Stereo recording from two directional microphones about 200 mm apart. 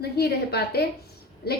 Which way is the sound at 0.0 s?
55° left (ahead or behind).